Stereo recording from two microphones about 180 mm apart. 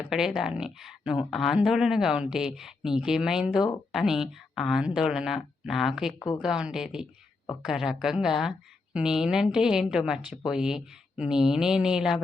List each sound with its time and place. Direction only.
0.1 s a woman's voice: centre (ahead or behind)
6.1 s speech: 20° left (ahead or behind)
6.4 s a woman's voice: 5° right (ahead or behind)